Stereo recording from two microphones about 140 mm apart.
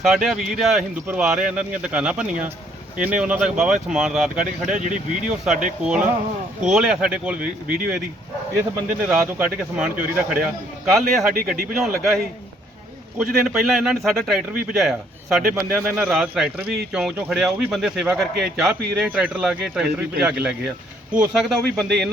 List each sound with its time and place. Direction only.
0.0 s speech: centre (ahead or behind)
4.7 s speech: 65° right (ahead or behind)
5.3 s speech: 5° right (ahead or behind)
9.0 s speech: 10° right (ahead or behind)